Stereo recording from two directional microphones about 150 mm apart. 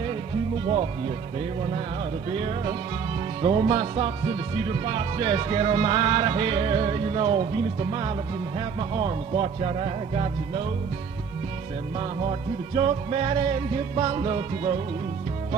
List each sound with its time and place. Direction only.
0.0 s music: 35° right (ahead or behind)
2.3 s speech: 40° right (ahead or behind)
11.9 s speech: 35° right (ahead or behind)